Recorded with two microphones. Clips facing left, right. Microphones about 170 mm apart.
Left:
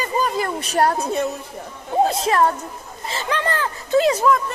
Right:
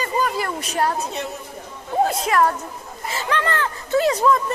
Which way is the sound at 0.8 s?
50° left (ahead or behind).